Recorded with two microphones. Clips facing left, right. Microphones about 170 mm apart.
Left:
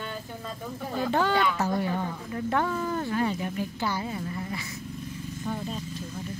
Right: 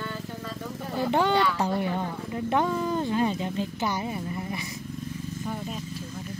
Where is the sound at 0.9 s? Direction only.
20° right (ahead or behind).